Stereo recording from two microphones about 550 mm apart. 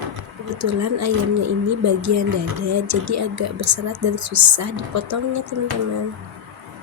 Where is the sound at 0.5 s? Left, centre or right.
Right.